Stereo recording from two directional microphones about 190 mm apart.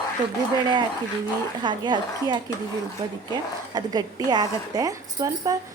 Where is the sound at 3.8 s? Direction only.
20° right (ahead or behind).